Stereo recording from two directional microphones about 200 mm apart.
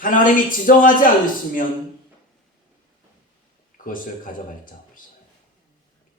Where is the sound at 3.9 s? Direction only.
45° left (ahead or behind).